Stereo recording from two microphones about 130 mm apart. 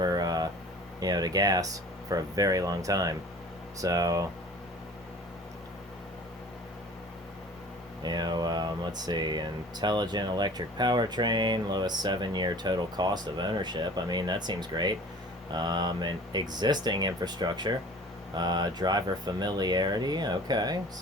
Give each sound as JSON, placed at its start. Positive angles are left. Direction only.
{"t": 0.0, "sound": "a sound", "side_deg": -30}
{"t": 0.9, "sound": "speech", "side_deg": -30}
{"t": 8.0, "sound": "speech", "side_deg": -35}